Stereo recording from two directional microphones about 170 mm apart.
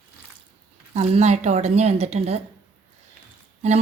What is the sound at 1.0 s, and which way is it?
Speech, 40° right (ahead or behind).